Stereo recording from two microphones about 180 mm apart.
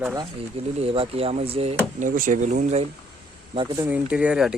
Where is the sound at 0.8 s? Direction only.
35° right (ahead or behind).